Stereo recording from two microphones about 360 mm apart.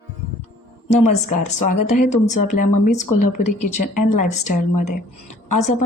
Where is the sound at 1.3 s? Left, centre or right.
Left.